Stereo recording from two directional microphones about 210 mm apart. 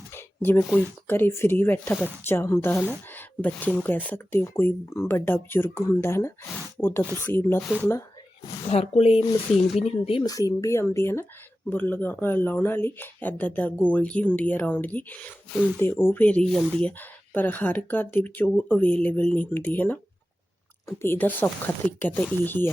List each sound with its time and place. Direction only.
0.1 s speech: 10° left (ahead or behind)
8.7 s speech: 30° left (ahead or behind); by 22.7 s 10° left (ahead or behind)